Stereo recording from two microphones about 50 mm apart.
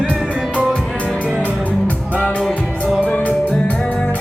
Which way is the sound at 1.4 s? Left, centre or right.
Left.